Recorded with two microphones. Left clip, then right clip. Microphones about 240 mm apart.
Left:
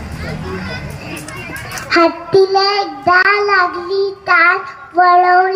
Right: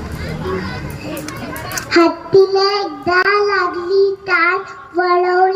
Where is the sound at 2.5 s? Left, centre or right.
Centre.